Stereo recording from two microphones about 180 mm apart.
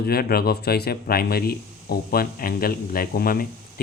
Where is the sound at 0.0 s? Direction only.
55° left (ahead or behind).